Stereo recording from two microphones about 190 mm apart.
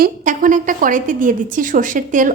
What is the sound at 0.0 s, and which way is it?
A woman's voice, 45° right (ahead or behind).